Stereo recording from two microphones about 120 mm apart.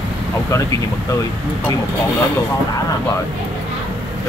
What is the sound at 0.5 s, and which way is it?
Speech, 30° left (ahead or behind).